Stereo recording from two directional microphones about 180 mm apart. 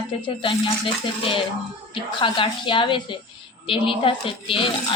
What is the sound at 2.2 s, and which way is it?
A woman's voice, 30° left (ahead or behind).